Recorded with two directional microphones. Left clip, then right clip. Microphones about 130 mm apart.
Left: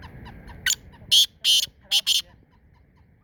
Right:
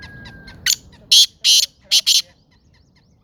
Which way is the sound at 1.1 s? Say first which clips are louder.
Right 6 dB; centre (ahead or behind).